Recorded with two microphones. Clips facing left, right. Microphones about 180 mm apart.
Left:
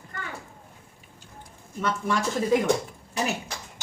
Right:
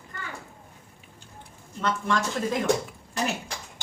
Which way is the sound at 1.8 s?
10° left (ahead or behind).